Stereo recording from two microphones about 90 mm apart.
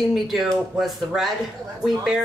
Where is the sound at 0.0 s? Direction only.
Centre (ahead or behind).